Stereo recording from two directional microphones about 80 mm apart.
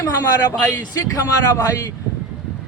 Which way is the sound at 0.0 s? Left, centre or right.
Left.